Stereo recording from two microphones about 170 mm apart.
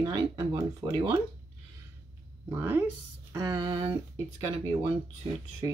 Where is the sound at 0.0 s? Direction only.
20° right (ahead or behind).